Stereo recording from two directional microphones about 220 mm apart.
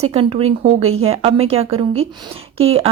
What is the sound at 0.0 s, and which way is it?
Speech, 25° right (ahead or behind).